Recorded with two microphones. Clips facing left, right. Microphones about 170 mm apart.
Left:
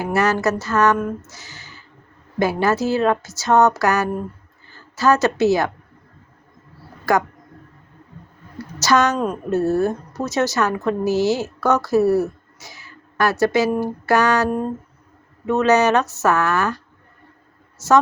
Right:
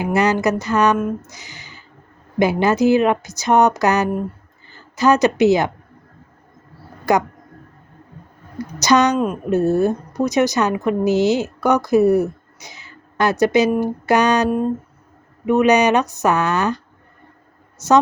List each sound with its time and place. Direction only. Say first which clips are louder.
0.0 s a woman's voice: right 2 dB; 15° right (ahead or behind)
1.3 s a sound: right 2 dB; 15° right (ahead or behind)
2.4 s a woman's voice: right 3 dB; 20° right (ahead or behind)
7.0 s speech: right 2 dB; 20° right (ahead or behind)
8.5 s a woman's voice: right 2 dB; 20° right (ahead or behind)
9.1 s a woman's voice: right 3 dB; 5° right (ahead or behind)
9.5 s a woman's voice: right 2 dB; 20° right (ahead or behind)